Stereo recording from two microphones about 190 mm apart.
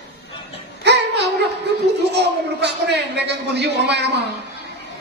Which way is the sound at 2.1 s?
60° right (ahead or behind).